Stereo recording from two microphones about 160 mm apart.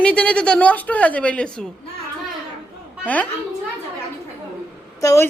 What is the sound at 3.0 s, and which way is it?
Speech, 10° left (ahead or behind).